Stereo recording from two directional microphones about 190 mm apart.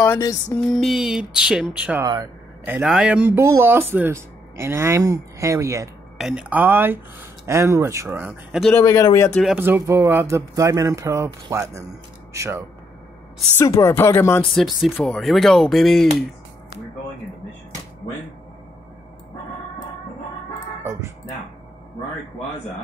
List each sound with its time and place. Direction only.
0.0 s speech: 15° left (ahead or behind)
0.6 s speech: centre (ahead or behind)
6.1 s speech: 5° right (ahead or behind)
8.7 s speech: 15° left (ahead or behind)
9.4 s speech: 5° right (ahead or behind)
13.6 s speech: 15° left (ahead or behind)
14.5 s speech: centre (ahead or behind)